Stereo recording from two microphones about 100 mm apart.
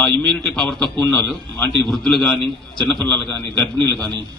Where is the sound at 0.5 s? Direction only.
10° left (ahead or behind).